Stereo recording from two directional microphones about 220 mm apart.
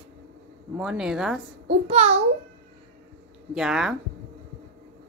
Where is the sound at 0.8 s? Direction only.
5° right (ahead or behind).